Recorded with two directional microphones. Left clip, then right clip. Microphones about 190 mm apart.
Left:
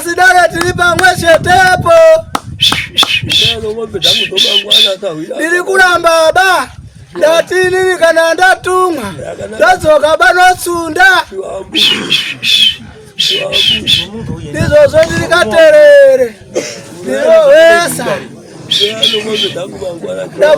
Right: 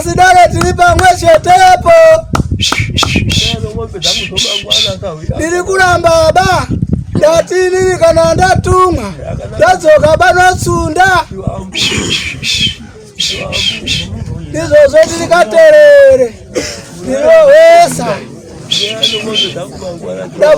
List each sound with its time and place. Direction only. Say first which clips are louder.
0.0 s speech: right 2 dB; 5° left (ahead or behind)
1.1 s a sound: right 1 dB; 5° left (ahead or behind)
4.0 s a man's voice: left 4 dB; 5° left (ahead or behind)
11.9 s beatboxing: left 3 dB; 55° right (ahead or behind)
12.1 s a man's voice: left 4 dB; 10° left (ahead or behind)
13.1 s bird: left 4 dB; 10° left (ahead or behind)
13.5 s a man's voice: left 5 dB; 10° left (ahead or behind)
17.3 s speech: right 2 dB; 5° left (ahead or behind)